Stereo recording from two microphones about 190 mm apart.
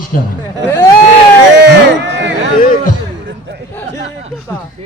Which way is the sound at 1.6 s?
65° right (ahead or behind).